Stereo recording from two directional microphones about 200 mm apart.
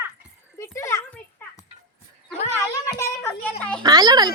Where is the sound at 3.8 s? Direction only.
20° right (ahead or behind).